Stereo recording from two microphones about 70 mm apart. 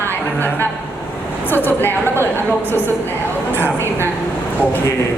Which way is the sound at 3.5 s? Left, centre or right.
Right.